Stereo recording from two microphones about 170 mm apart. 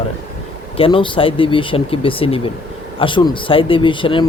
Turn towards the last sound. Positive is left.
turn(degrees=30)  # may be behind; listen again after turning